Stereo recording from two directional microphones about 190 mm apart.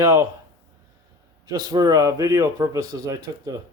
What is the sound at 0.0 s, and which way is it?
Speech, 15° right (ahead or behind).